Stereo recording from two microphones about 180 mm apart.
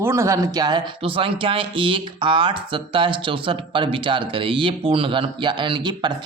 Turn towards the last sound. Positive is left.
turn(degrees=-25)  # may be behind; listen again after turning